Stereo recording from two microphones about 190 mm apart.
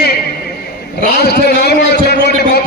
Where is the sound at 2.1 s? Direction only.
60° left (ahead or behind).